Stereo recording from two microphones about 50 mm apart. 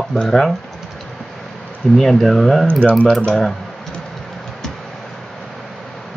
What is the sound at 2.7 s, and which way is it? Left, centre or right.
Speech, left.